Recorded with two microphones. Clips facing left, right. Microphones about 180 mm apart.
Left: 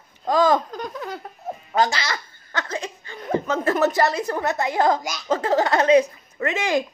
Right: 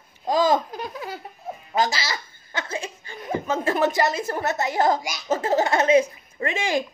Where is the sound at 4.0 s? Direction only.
20° right (ahead or behind).